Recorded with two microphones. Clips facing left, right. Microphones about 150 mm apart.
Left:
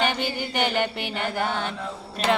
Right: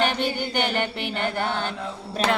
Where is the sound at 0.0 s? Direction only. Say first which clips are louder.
Right 2 dB; centre (ahead or behind).